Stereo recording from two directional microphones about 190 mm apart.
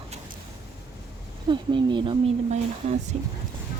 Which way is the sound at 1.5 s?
25° right (ahead or behind).